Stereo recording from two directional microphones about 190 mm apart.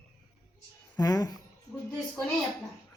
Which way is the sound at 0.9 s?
20° left (ahead or behind).